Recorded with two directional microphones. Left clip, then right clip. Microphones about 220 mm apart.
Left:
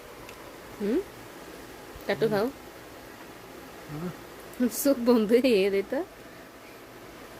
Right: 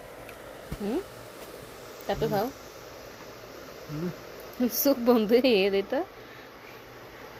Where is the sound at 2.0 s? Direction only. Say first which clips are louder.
Left 2 dB; 20° left (ahead or behind).